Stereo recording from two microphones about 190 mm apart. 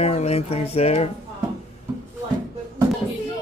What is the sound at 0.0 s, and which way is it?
Speech, 35° left (ahead or behind).